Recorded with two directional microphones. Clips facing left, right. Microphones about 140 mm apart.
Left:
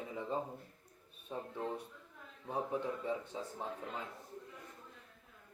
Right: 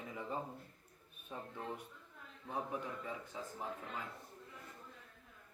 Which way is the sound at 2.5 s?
30° left (ahead or behind).